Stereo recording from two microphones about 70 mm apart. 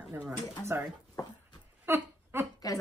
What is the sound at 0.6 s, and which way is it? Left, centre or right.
Speech, right.